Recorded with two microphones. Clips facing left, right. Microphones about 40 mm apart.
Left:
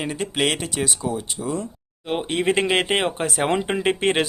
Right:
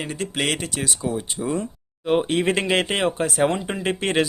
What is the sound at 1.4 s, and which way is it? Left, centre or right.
Speech, centre.